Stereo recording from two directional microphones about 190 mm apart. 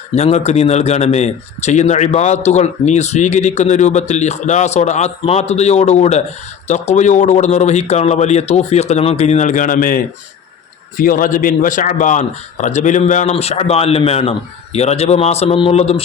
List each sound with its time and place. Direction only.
0.2 s a man's voice: 35° left (ahead or behind)